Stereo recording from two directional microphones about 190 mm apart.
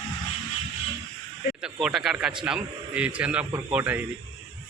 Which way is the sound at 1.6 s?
Centre (ahead or behind).